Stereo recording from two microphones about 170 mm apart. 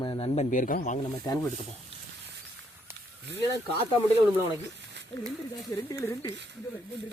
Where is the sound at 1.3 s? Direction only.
20° left (ahead or behind).